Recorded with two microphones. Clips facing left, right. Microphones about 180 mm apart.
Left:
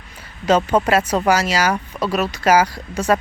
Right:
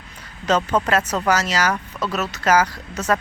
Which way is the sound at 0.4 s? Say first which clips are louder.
Left 4 dB; 10° left (ahead or behind).